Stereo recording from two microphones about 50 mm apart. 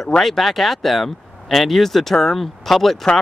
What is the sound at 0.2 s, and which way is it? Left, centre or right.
Speech, centre.